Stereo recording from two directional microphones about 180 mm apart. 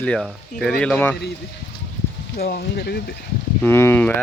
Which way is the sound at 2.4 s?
60° left (ahead or behind).